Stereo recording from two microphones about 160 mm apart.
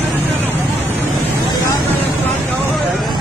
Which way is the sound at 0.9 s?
15° left (ahead or behind).